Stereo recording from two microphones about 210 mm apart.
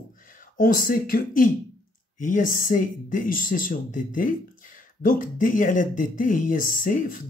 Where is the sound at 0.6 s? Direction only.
45° left (ahead or behind).